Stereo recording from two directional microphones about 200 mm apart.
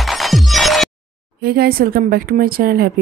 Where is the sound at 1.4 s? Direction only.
50° right (ahead or behind).